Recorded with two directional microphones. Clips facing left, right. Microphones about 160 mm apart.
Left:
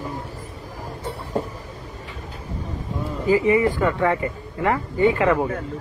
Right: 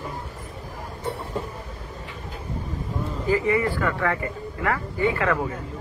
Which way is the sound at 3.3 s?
20° left (ahead or behind).